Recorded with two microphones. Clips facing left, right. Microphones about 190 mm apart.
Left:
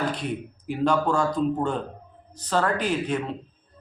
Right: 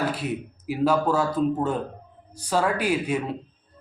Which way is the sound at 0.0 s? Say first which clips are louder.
Right 1 dB; 5° right (ahead or behind).